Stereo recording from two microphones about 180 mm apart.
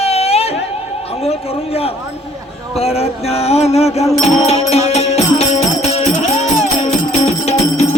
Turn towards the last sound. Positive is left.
turn(degrees=35)  # may be behind; listen again after turning